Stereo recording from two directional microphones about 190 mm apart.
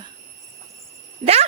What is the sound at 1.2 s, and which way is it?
Speech, 30° right (ahead or behind).